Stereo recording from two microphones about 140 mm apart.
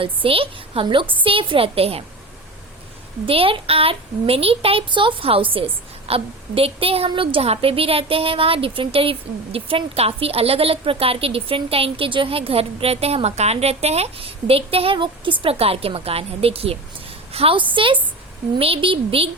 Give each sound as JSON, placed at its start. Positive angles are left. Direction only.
{"t": 0.0, "sound": "a woman's voice", "side_deg": -40}
{"t": 3.2, "sound": "a woman's voice", "side_deg": -40}